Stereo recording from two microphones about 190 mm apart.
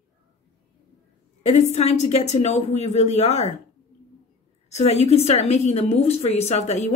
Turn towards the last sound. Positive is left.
turn(degrees=35)  # may be behind; listen again after turning